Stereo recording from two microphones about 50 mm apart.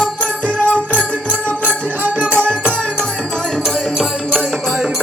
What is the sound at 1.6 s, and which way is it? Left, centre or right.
Music, right.